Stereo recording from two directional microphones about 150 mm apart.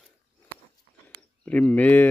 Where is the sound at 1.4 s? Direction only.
10° left (ahead or behind).